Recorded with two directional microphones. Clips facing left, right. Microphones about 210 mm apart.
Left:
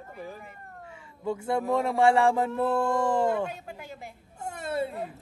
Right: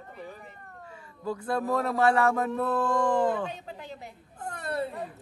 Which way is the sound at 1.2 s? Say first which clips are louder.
Left 2 dB; 25° left (ahead or behind).